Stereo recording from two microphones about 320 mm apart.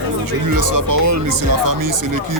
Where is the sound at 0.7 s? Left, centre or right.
Right.